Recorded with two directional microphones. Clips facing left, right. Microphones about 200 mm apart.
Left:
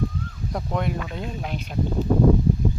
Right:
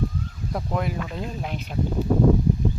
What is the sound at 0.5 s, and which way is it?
Speech, centre (ahead or behind).